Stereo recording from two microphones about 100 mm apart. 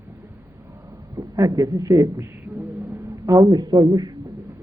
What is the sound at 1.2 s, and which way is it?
A man's voice, 35° right (ahead or behind).